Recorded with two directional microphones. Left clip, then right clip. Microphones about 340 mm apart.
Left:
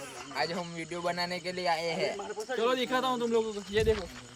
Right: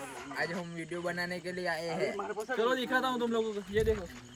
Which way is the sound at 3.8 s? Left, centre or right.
Left.